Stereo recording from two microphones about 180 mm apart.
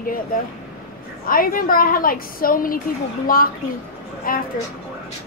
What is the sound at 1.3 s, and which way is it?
A child's voice, 50° left (ahead or behind).